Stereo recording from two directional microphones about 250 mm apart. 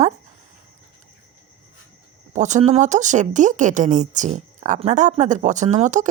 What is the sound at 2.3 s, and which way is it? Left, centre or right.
Speech, right.